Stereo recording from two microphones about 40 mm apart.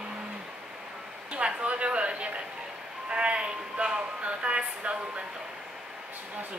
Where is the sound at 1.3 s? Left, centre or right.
Right.